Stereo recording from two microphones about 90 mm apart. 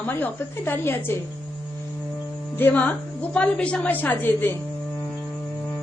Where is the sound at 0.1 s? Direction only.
25° left (ahead or behind).